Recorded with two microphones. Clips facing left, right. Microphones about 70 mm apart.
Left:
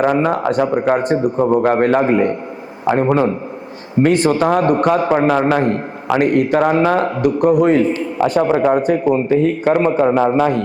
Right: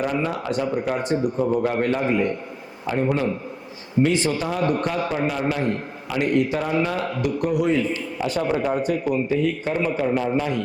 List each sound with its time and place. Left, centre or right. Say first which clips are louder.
0.0 s a man's voice: left 9 dB; left
10.2 s a man's voice: left 9 dB; left